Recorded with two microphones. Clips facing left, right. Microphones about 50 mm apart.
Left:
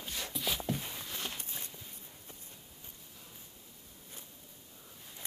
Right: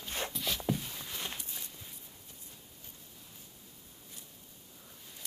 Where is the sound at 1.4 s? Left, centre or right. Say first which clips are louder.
Left 1 dB; left.